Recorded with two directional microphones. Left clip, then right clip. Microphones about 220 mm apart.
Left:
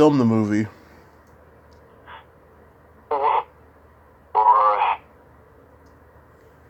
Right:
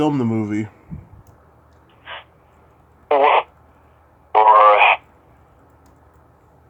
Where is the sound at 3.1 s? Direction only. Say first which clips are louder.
Right 6 dB; 20° right (ahead or behind).